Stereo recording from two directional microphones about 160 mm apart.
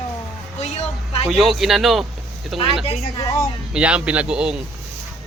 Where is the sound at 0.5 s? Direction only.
40° left (ahead or behind).